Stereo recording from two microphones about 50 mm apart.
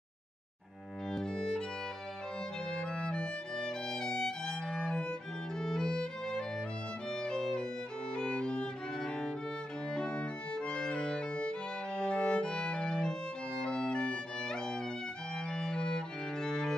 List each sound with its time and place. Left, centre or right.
1.1 s music: centre
2.7 s violin: centre
5.6 s music: centre
7.1 s violin: centre